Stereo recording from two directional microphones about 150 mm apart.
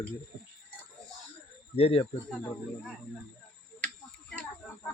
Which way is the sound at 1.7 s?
40° left (ahead or behind).